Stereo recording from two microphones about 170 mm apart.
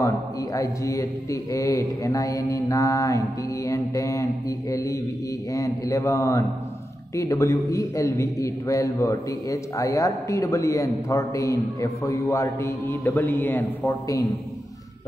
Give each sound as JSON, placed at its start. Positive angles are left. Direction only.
{"t": 0.0, "sound": "a man's voice", "side_deg": 20}